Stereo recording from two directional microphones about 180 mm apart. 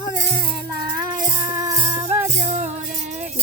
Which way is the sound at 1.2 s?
20° right (ahead or behind).